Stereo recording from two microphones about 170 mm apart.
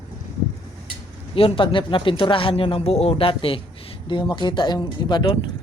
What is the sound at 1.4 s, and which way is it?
Speech, 30° left (ahead or behind).